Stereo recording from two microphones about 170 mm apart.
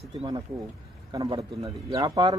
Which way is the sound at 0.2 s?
25° right (ahead or behind).